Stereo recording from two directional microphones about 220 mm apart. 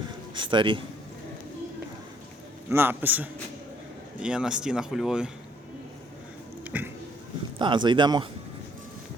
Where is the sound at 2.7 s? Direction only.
10° right (ahead or behind).